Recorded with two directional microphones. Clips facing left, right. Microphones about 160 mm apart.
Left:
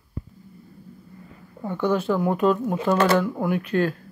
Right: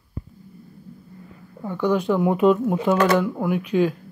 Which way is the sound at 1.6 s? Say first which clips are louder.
Right 2 dB; 10° right (ahead or behind).